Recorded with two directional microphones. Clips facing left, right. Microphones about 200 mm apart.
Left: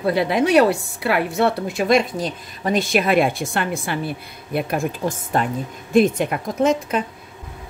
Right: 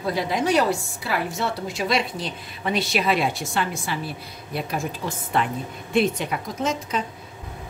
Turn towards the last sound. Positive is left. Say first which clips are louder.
# left 7 dB
turn(degrees=55)  # may be behind; listen again after turning